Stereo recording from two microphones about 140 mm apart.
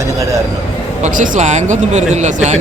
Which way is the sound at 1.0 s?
70° right (ahead or behind).